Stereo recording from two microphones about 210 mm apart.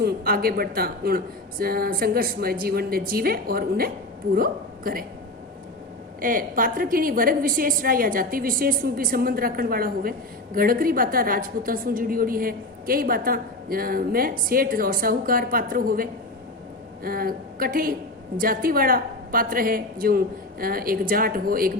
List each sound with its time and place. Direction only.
0.0 s a woman's voice: 45° right (ahead or behind)
6.2 s a woman's voice: 40° right (ahead or behind)